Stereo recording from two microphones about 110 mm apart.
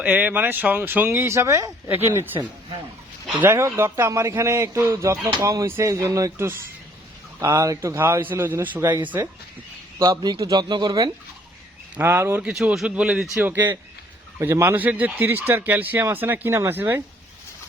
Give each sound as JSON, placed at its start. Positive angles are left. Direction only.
{"t": 0.0, "sound": "speech", "side_deg": -15}
{"t": 10.0, "sound": "a man's voice", "side_deg": -35}
{"t": 11.9, "sound": "speech", "side_deg": -20}
{"t": 12.4, "sound": "speech", "side_deg": -10}